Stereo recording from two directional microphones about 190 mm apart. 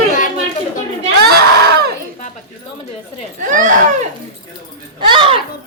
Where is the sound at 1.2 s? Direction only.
55° right (ahead or behind).